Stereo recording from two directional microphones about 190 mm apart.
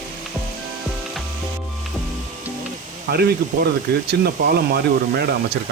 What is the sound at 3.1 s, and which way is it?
Speech, 55° right (ahead or behind).